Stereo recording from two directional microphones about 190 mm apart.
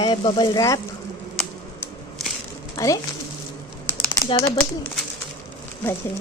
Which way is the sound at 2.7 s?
20° left (ahead or behind).